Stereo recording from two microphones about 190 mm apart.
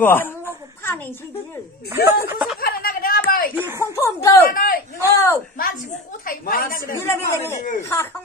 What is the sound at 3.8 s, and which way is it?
Speech, 15° left (ahead or behind).